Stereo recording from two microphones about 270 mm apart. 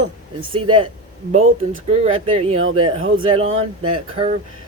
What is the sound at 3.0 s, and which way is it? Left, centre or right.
Speech, right.